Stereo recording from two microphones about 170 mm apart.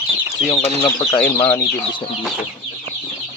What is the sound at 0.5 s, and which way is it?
Speech, 25° left (ahead or behind).